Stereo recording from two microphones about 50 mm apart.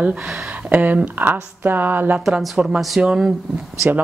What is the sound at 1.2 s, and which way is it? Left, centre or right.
A woman's voice, right.